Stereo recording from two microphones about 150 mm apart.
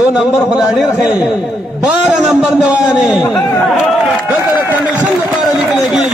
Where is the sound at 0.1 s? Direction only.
5° right (ahead or behind).